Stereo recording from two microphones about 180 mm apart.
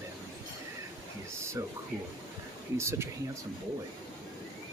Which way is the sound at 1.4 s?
15° right (ahead or behind).